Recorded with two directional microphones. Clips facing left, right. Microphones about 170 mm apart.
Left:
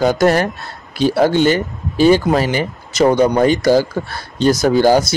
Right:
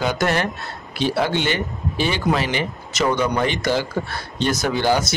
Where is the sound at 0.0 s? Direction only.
40° left (ahead or behind).